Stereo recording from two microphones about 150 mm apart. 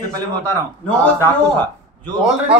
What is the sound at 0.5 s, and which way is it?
Speech, 10° left (ahead or behind).